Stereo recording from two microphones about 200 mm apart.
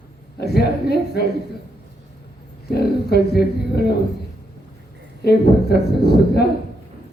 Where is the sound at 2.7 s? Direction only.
55° left (ahead or behind).